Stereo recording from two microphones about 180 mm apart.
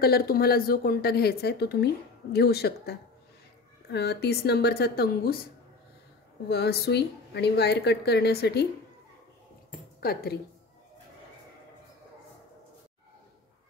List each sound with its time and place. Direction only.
0.0 s a woman's voice: 60° left (ahead or behind)
6.5 s a woman's voice: 65° left (ahead or behind)
9.9 s speech: 60° left (ahead or behind)